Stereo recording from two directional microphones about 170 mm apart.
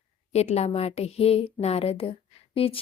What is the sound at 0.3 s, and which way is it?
A woman's voice, 40° left (ahead or behind).